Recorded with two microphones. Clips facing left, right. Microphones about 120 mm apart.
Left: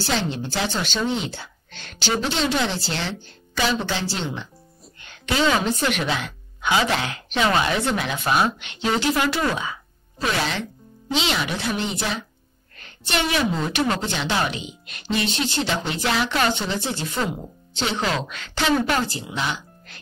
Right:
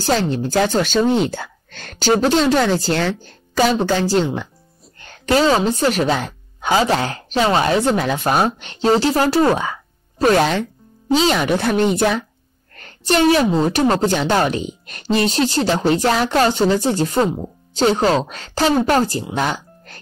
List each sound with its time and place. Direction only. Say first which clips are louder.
0.0 s a woman's voice: right 7 dB; 40° right (ahead or behind)